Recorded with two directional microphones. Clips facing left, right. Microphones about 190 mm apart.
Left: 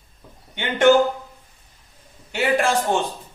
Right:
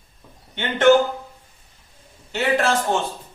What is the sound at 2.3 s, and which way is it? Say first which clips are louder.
Speech: even; 10° left (ahead or behind).